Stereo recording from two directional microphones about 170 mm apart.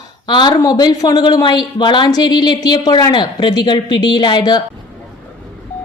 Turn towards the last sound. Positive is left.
turn(degrees=25)  # may be behind; listen again after turning